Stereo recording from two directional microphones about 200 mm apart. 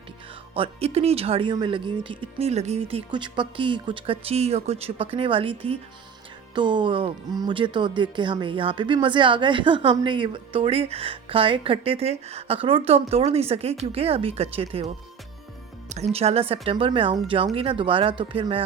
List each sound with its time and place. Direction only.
0.5 s speech: 30° right (ahead or behind)
16.1 s speech: 30° right (ahead or behind)